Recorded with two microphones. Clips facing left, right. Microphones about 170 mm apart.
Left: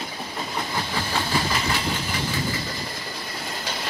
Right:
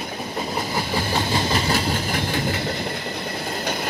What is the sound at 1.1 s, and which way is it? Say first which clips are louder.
Train: right 2 dB; 30° right (ahead or behind).